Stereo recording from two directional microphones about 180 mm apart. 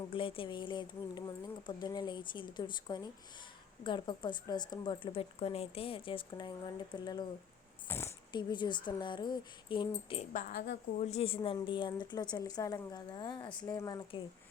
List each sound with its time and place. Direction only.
0.1 s speech: 30° left (ahead or behind); by 8.1 s 15° left (ahead or behind)
8.3 s speech: 25° left (ahead or behind)
10.3 s speech: 50° left (ahead or behind)
11.0 s a woman's voice: 35° left (ahead or behind)
11.3 s speech: 25° left (ahead or behind)